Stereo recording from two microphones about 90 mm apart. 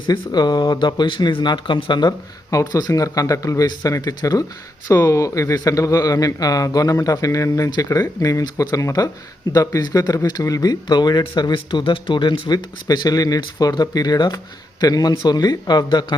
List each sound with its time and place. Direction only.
0.1 s speech: 50° left (ahead or behind)
2.5 s speech: 40° left (ahead or behind)